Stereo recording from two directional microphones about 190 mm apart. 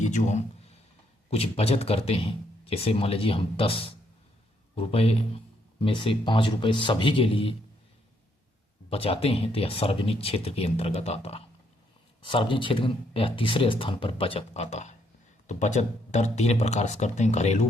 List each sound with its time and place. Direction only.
0.0 s speech: 40° left (ahead or behind)
8.9 s speech: 30° left (ahead or behind)